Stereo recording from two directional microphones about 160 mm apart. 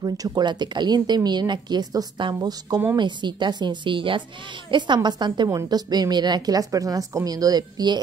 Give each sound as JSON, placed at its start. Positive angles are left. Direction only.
{"t": 0.0, "sound": "a woman's voice", "side_deg": -25}